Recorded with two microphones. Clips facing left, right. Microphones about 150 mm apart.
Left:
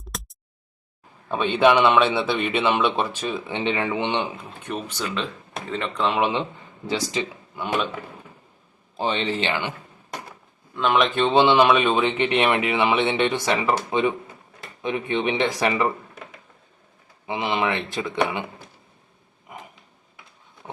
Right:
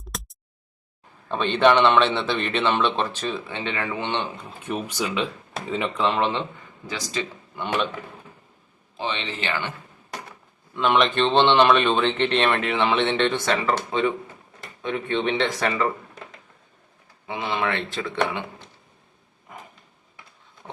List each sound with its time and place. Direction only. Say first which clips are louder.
0.0 s a sound: even; centre (ahead or behind)
1.3 s speech: left 1 dB; 10° left (ahead or behind)
4.4 s speech: right 1 dB; centre (ahead or behind)
6.1 s speech: left 1 dB; 10° left (ahead or behind)
7.5 s speech: even; 5° left (ahead or behind)
9.0 s speech: left 5 dB; 40° left (ahead or behind)
9.4 s speech: left 3 dB; 20° left (ahead or behind)
10.8 s speech: even; centre (ahead or behind)
17.2 s speech: left 2 dB; 20° left (ahead or behind)